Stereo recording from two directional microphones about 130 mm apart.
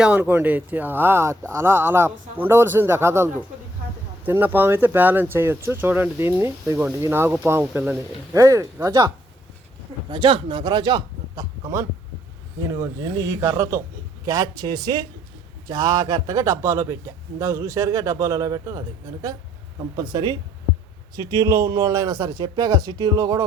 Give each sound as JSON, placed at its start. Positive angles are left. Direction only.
{"t": 0.0, "sound": "speech", "side_deg": -10}
{"t": 4.3, "sound": "a man's voice", "side_deg": -15}
{"t": 8.3, "sound": "a man's voice", "side_deg": -25}
{"t": 10.1, "sound": "a man's voice", "side_deg": -35}
{"t": 20.0, "sound": "a man's voice", "side_deg": -35}
{"t": 21.3, "sound": "a man's voice", "side_deg": -25}